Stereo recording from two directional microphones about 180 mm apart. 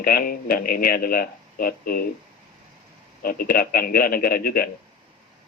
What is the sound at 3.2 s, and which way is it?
Speech, 55° left (ahead or behind).